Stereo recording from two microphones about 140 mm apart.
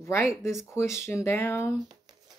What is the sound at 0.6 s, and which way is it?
Speech, 20° left (ahead or behind).